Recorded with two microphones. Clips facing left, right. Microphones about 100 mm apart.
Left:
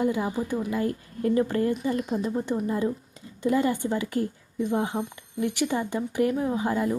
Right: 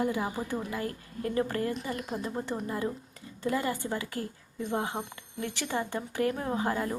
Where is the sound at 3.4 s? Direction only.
25° left (ahead or behind).